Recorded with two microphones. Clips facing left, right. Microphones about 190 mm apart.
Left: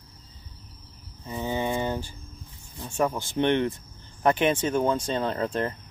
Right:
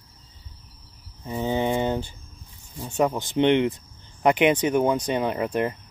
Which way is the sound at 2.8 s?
15° right (ahead or behind).